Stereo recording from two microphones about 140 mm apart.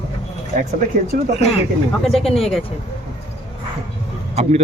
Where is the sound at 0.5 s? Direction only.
90° right.